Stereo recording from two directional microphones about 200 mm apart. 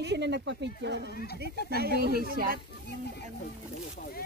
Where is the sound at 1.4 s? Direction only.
50° right (ahead or behind).